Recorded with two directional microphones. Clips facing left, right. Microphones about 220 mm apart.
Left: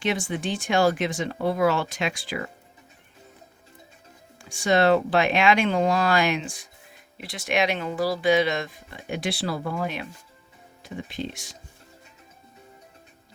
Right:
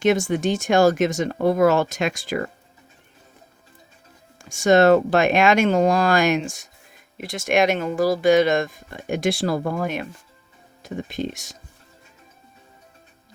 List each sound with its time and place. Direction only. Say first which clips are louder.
0.0 s speech: right 8 dB; 45° right (ahead or behind)
4.4 s speech: right 6 dB; 45° right (ahead or behind)